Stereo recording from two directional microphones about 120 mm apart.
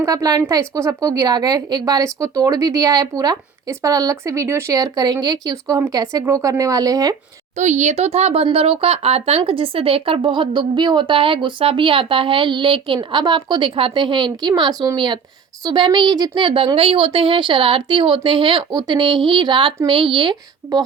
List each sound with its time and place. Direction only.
0.0 s a woman's voice: 30° right (ahead or behind)
7.5 s speech: 75° right (ahead or behind); by 20.8 s 40° right (ahead or behind)